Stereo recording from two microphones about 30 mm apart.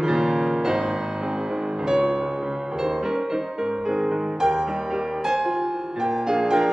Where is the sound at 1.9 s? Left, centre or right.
Right.